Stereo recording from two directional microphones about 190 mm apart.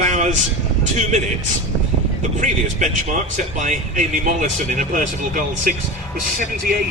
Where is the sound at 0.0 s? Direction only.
40° right (ahead or behind).